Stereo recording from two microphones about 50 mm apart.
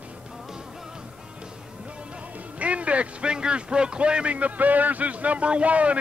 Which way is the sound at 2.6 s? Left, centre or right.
Right.